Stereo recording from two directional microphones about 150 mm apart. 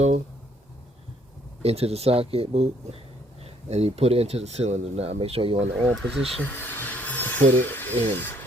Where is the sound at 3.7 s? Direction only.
45° right (ahead or behind).